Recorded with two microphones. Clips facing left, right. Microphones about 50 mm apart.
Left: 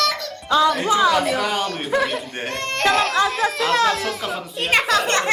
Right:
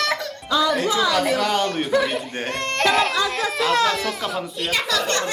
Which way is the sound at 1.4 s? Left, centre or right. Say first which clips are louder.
Right 2 dB; centre.